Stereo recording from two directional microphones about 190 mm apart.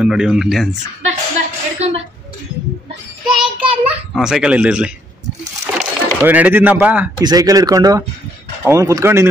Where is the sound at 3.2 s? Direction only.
5° right (ahead or behind).